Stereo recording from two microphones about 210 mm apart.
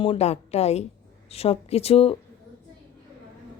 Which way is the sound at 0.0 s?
30° left (ahead or behind).